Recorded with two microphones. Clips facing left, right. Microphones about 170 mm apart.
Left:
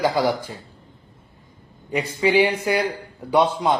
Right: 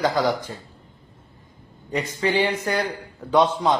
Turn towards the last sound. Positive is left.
turn(degrees=10)  # may be behind; listen again after turning